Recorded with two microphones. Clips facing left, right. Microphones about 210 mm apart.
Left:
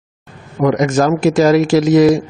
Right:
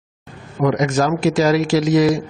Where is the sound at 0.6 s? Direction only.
50° left (ahead or behind).